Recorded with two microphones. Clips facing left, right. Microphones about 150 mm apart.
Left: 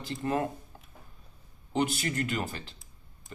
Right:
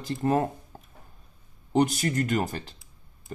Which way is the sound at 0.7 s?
40° right (ahead or behind).